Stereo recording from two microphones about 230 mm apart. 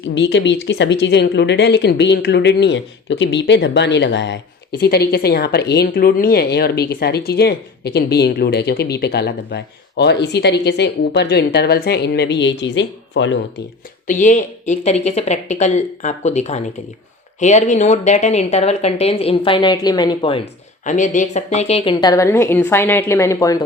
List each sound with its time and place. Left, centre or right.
0.1 s speech: left
14.1 s speech: left
20.8 s a woman's voice: left; by 23.6 s centre